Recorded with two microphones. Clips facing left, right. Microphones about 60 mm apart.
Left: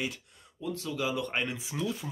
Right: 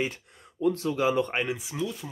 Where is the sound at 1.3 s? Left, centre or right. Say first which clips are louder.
Right 4 dB; centre.